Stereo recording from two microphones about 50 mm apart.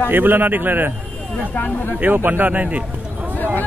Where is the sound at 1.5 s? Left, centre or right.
Left.